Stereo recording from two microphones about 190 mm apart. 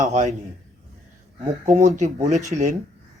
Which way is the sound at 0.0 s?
40° right (ahead or behind).